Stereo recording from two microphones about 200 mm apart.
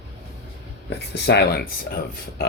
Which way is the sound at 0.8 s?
55° left (ahead or behind).